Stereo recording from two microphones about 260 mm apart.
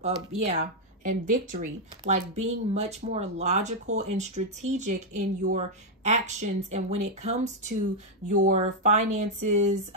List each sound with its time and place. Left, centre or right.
0.4 s speech: right